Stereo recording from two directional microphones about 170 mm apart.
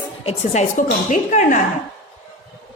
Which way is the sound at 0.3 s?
45° left (ahead or behind).